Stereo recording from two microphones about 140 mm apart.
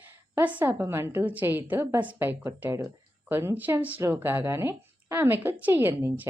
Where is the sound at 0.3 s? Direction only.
15° right (ahead or behind).